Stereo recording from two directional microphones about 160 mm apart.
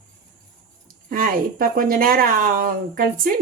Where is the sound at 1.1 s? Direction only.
60° right (ahead or behind).